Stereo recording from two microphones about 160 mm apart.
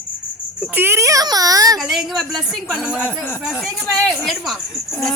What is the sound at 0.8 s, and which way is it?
A child's voice, 15° right (ahead or behind).